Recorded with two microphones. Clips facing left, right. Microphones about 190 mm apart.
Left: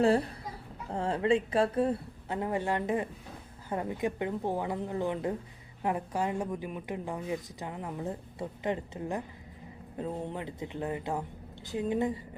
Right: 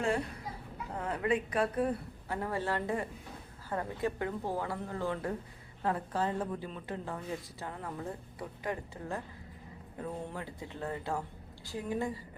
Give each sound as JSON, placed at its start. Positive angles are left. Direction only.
{"t": 0.0, "sound": "a child's voice", "side_deg": 35}